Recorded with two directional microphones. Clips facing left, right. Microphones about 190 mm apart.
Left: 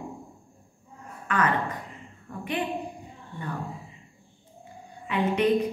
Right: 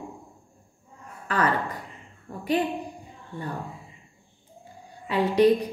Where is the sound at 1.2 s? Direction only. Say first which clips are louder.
Right 1 dB; 35° right (ahead or behind).